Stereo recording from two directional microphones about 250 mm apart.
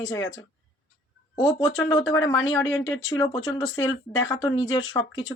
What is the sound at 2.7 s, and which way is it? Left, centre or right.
Speech, left.